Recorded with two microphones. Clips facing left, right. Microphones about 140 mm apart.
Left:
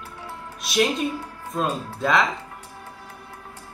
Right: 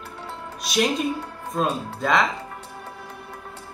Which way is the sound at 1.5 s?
Centre (ahead or behind).